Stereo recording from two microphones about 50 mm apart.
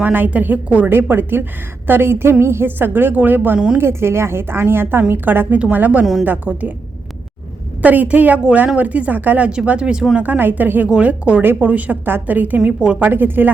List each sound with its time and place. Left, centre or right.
0.0 s a woman's voice: right
0.9 s a woman's voice: right
3.8 s a woman's voice: right
7.8 s a woman's voice: right
9.6 s speech: centre
10.2 s a woman's voice: right